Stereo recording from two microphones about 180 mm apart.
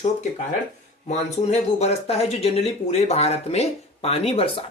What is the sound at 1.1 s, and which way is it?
Speech, 40° left (ahead or behind).